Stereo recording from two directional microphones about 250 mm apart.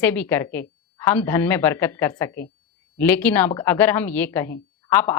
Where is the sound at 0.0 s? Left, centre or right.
Centre.